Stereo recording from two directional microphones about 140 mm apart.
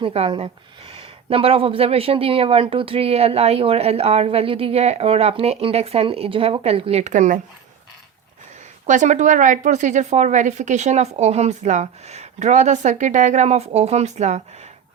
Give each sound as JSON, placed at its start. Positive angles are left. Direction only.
{"t": 0.0, "sound": "speech", "side_deg": -40}
{"t": 7.0, "sound": "speech", "side_deg": -60}
{"t": 8.9, "sound": "speech", "side_deg": -60}